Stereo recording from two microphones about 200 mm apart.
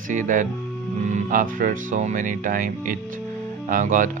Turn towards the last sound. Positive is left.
turn(degrees=-40)  # may be behind; listen again after turning